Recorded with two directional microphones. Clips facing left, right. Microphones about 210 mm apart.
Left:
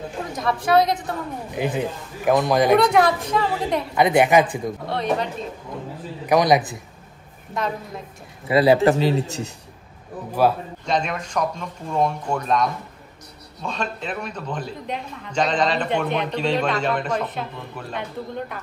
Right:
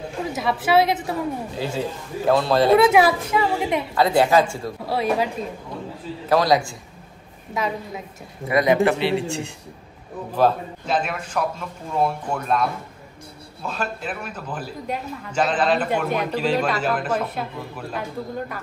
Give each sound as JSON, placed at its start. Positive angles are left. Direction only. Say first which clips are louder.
{"t": 0.3, "sound": "speech", "louder": "even", "side_deg": -5}
{"t": 1.5, "sound": "speech", "louder": "left 2 dB", "side_deg": 15}
{"t": 2.9, "sound": "speech", "louder": "right 1 dB", "side_deg": -5}
{"t": 3.9, "sound": "speech", "louder": "left 1 dB", "side_deg": 20}
{"t": 4.8, "sound": "speech", "louder": "right 3 dB", "side_deg": -5}
{"t": 6.2, "sound": "speech", "louder": "left 1 dB", "side_deg": 20}
{"t": 7.5, "sound": "speech", "louder": "right 1 dB", "side_deg": 0}
{"t": 8.5, "sound": "speech", "louder": "left 2 dB", "side_deg": 30}
{"t": 10.9, "sound": "speech", "louder": "left 1 dB", "side_deg": -5}